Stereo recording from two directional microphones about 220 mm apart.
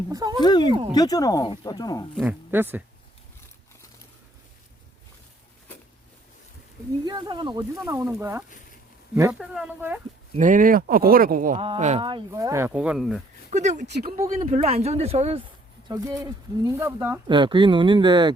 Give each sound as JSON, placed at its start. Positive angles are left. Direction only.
{"t": 0.1, "sound": "speech", "side_deg": -15}
{"t": 0.4, "sound": "speech", "side_deg": 20}
{"t": 2.1, "sound": "speech", "side_deg": -10}
{"t": 7.0, "sound": "speech", "side_deg": -20}
{"t": 10.3, "sound": "speech", "side_deg": -35}
{"t": 11.6, "sound": "speech", "side_deg": -25}
{"t": 13.5, "sound": "speech", "side_deg": -30}
{"t": 13.8, "sound": "speech", "side_deg": -50}
{"t": 14.2, "sound": "speech", "side_deg": -30}
{"t": 15.9, "sound": "speech", "side_deg": -15}